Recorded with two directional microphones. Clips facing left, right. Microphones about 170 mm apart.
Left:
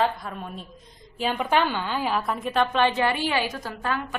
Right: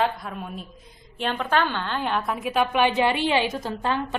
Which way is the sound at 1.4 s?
15° left (ahead or behind).